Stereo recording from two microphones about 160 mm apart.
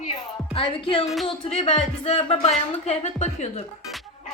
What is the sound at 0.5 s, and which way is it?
Music, 35° left (ahead or behind).